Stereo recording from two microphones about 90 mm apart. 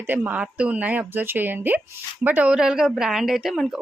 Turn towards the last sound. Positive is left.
turn(degrees=-5)  # may be behind; listen again after turning